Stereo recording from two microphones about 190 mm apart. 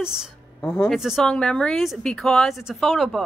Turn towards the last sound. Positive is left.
turn(degrees=0)  # may be behind; listen again after turning